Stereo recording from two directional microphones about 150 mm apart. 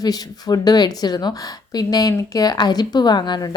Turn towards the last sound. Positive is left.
turn(degrees=25)  # may be behind; listen again after turning